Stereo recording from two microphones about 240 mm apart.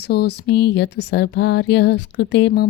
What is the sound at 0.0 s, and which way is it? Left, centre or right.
Speech, left.